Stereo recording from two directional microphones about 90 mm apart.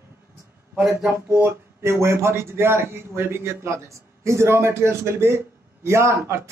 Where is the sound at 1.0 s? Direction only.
20° right (ahead or behind).